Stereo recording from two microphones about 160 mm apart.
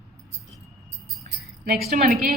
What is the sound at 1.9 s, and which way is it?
Speech, 60° right (ahead or behind).